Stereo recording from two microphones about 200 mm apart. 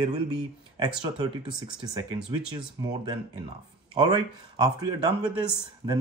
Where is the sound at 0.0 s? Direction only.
20° right (ahead or behind).